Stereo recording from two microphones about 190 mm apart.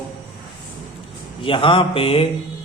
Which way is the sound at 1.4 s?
25° left (ahead or behind).